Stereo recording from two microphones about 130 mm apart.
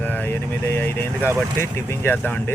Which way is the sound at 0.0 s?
10° left (ahead or behind).